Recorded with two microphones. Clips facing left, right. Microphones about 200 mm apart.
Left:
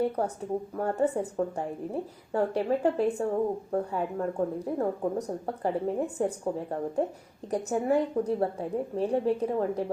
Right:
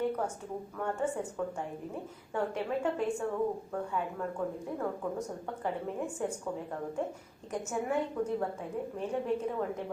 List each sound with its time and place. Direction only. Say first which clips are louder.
0.8 s speech: left 5 dB; 35° left (ahead or behind)